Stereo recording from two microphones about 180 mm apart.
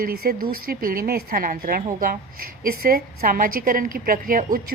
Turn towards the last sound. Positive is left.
turn(degrees=-50)  # may be behind; listen again after turning